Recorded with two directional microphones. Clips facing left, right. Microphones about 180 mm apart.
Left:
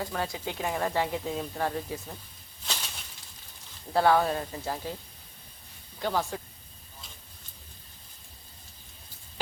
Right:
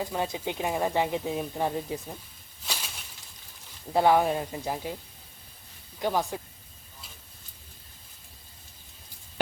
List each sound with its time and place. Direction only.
0.0 s speech: 20° right (ahead or behind)
2.6 s a sound: 5° right (ahead or behind)
3.9 s speech: 15° right (ahead or behind)
6.0 s speech: 15° right (ahead or behind)